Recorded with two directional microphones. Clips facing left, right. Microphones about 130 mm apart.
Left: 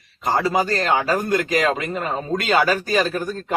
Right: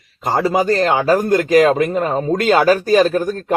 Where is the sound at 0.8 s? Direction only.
35° right (ahead or behind).